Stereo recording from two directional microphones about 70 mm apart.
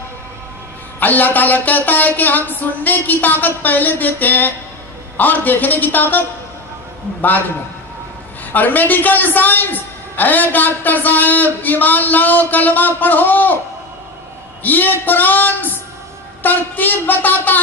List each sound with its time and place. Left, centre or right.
0.9 s a man's voice: left
8.5 s a man's voice: left
14.6 s a man's voice: left